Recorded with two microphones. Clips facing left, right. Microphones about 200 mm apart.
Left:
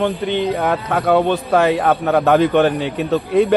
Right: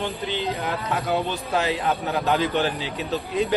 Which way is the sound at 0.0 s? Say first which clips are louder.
Left 9 dB; 60° left (ahead or behind).